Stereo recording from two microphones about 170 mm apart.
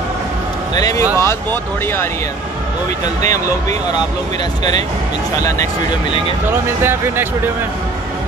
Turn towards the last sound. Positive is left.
turn(degrees=-15)  # may be behind; listen again after turning